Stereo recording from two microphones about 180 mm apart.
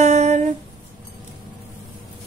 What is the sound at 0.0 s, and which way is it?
Humming, 40° right (ahead or behind).